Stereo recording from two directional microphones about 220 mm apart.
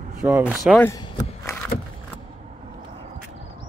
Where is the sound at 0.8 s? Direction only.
15° left (ahead or behind).